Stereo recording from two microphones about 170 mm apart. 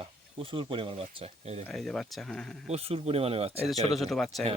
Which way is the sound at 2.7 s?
35° right (ahead or behind).